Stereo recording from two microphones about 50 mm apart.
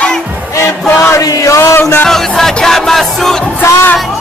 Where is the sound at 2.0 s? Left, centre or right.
Centre.